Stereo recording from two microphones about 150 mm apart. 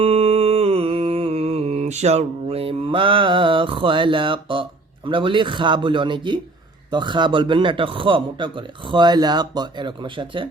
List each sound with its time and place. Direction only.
0.0 s mantra: 40° right (ahead or behind)
5.0 s speech: 35° right (ahead or behind)